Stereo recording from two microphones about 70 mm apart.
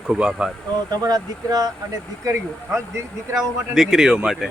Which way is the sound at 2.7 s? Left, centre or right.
Right.